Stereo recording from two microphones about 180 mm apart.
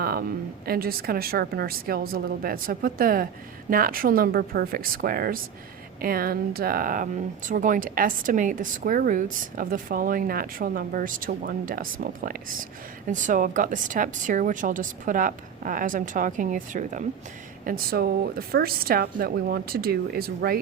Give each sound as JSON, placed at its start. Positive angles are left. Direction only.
{"t": 0.0, "sound": "speech", "side_deg": -55}
{"t": 17.7, "sound": "speech", "side_deg": -55}